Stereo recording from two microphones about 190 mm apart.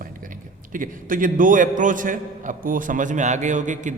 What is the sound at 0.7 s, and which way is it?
A man's voice, 45° right (ahead or behind).